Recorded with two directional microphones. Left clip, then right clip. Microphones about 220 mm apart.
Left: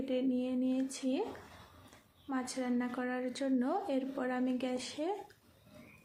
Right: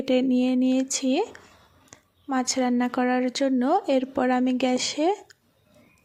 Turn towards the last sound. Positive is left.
turn(degrees=-40)  # may be behind; listen again after turning